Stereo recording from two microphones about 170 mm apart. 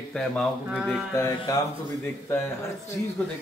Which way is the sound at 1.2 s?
20° left (ahead or behind).